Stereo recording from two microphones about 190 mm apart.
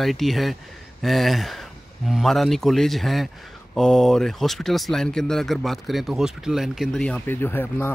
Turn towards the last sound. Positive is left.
turn(degrees=10)  # may be behind; listen again after turning